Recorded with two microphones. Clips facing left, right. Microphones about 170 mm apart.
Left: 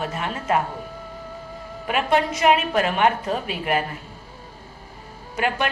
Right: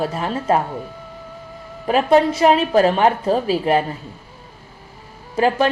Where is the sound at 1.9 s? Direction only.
35° right (ahead or behind).